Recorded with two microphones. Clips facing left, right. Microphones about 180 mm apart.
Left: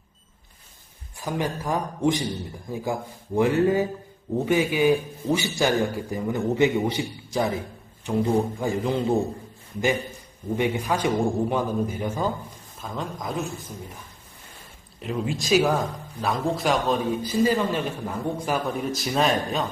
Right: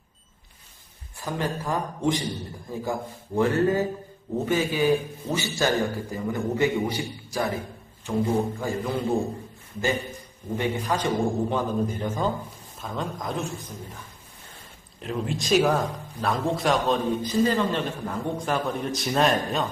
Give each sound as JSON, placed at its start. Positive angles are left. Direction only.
{"t": 1.2, "sound": "a man's voice", "side_deg": 15}
{"t": 10.6, "sound": "a man's voice", "side_deg": 10}
{"t": 15.0, "sound": "speech", "side_deg": 0}